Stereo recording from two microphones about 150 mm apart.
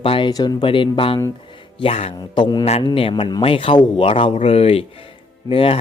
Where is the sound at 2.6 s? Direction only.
45° left (ahead or behind).